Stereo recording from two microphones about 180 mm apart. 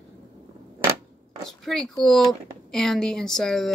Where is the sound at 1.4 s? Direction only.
Centre (ahead or behind).